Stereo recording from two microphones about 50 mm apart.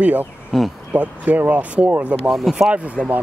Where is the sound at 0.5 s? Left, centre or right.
Centre.